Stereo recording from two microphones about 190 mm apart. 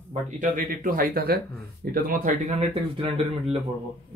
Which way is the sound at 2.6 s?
35° right (ahead or behind).